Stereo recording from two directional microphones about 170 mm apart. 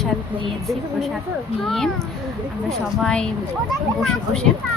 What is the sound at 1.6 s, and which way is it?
A woman's voice, centre (ahead or behind).